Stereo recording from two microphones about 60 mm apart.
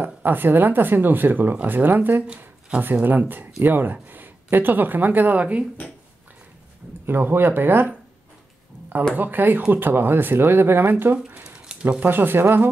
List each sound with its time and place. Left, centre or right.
0.0 s speech: right
2.2 s a sound: right
2.8 s speech: right
7.1 s speech: right
9.1 s speech: right
11.4 s a sound: centre
12.0 s speech: right